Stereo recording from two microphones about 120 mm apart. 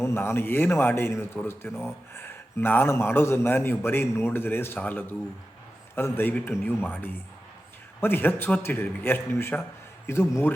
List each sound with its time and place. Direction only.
0.0 s speech: 20° left (ahead or behind)